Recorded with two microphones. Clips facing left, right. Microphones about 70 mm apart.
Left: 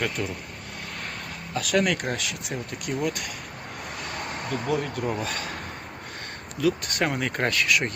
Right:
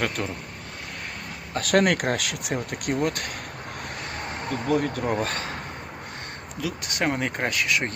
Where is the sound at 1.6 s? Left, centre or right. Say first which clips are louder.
Right 3 dB; right.